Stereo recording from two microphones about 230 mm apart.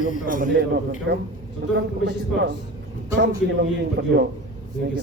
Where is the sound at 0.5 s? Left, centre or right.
Right.